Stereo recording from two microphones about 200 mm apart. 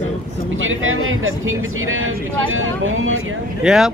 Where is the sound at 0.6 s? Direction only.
80° right.